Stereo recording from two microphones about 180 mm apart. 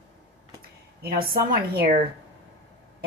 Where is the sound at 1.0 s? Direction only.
55° right (ahead or behind).